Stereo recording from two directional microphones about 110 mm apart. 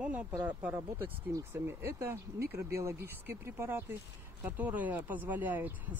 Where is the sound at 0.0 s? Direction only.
10° right (ahead or behind).